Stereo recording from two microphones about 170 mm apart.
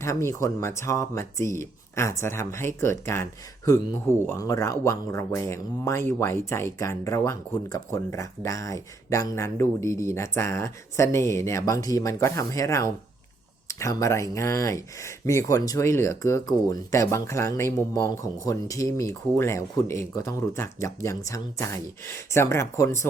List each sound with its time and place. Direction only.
0.0 s speech: 15° left (ahead or behind)